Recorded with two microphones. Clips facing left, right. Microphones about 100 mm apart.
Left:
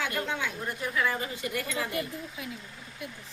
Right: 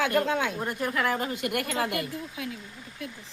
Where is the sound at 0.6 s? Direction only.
55° right (ahead or behind); by 2.4 s 85° right.